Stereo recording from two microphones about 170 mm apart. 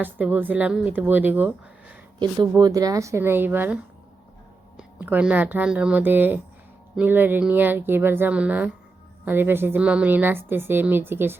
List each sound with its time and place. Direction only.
0.0 s a woman's voice: 10° right (ahead or behind)
2.1 s a woman's voice: 25° right (ahead or behind)
4.8 s a woman's voice: 10° right (ahead or behind)